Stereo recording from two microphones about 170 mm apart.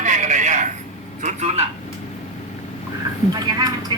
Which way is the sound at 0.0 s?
45° right (ahead or behind).